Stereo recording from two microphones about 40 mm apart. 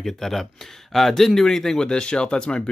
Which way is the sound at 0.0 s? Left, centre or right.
Centre.